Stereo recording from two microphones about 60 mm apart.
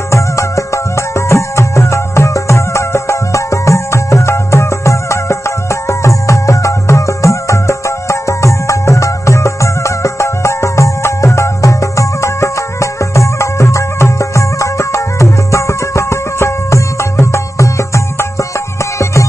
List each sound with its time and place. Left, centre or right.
0.1 s music: left